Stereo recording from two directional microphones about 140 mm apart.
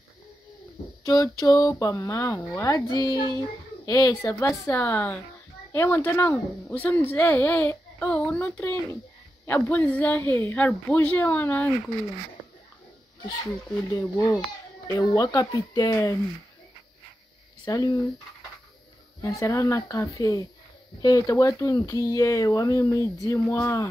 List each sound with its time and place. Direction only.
1.0 s a woman's voice: 25° left (ahead or behind)
13.9 s speech: 25° left (ahead or behind)
17.6 s speech: 30° left (ahead or behind)
19.2 s speech: 20° left (ahead or behind)